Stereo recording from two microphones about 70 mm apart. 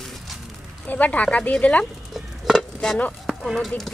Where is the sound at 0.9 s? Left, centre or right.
Left.